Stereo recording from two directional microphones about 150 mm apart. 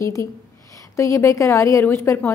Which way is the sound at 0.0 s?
20° left (ahead or behind).